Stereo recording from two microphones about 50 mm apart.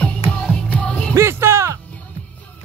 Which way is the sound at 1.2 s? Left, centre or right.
Right.